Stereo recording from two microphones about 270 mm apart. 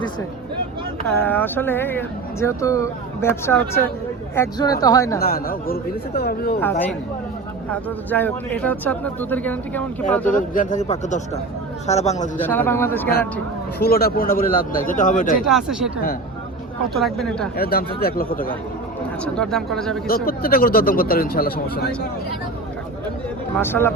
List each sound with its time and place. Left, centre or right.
1.0 s speech: centre
5.2 s speech: left
6.6 s speech: centre
10.3 s a man's voice: left
12.5 s speech: centre
13.7 s speech: left
15.4 s speech: centre
16.9 s speech: centre
17.6 s speech: left
19.2 s speech: centre
20.1 s speech: left
23.6 s speech: centre